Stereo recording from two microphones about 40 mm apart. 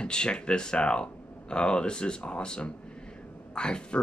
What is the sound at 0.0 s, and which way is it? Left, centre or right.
Speech, left.